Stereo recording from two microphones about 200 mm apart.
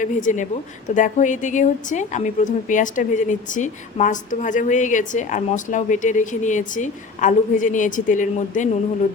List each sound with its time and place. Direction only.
0.0 s a woman's voice: 40° left (ahead or behind)